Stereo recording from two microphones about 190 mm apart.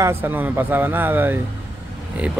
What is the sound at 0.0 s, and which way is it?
Speech, 10° right (ahead or behind).